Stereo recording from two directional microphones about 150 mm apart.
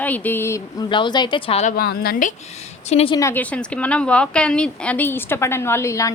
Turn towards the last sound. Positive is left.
turn(degrees=20)  # may be behind; listen again after turning